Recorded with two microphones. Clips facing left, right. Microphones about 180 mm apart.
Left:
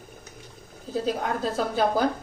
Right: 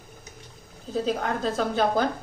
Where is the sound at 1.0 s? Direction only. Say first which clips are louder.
Even; 5° left (ahead or behind).